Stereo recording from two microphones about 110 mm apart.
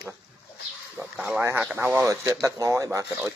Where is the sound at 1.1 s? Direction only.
10° right (ahead or behind).